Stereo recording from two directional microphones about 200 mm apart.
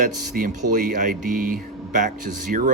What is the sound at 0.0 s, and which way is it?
Speech, 40° right (ahead or behind).